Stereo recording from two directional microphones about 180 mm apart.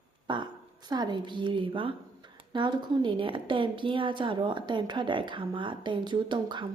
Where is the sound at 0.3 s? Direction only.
25° right (ahead or behind).